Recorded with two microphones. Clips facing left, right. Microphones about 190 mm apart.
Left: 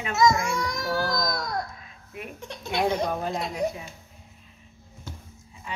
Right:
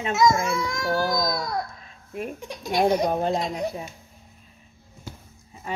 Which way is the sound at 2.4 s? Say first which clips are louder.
Right 1 dB; 10° right (ahead or behind).